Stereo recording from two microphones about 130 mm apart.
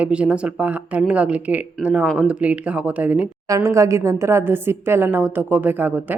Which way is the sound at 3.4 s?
25° right (ahead or behind).